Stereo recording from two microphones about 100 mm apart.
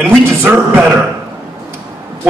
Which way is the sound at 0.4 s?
20° right (ahead or behind).